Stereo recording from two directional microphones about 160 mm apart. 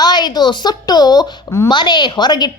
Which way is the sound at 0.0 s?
25° left (ahead or behind).